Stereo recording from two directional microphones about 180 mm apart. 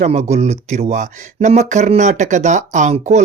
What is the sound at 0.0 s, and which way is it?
Speech, 40° right (ahead or behind).